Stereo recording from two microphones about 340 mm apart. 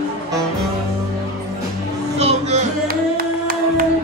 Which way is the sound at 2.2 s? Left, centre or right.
Centre.